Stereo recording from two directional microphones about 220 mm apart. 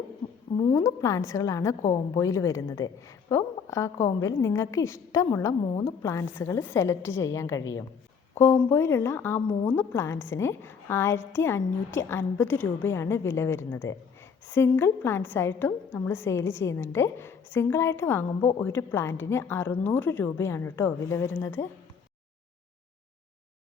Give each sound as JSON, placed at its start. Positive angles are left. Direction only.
{"t": 0.5, "sound": "a woman's voice", "side_deg": 15}